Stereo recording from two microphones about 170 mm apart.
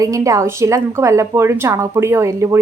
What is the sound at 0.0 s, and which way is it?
A woman's voice, 20° right (ahead or behind).